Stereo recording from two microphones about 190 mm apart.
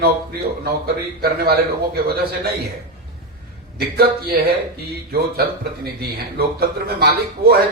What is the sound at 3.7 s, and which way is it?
Speech, 55° right (ahead or behind).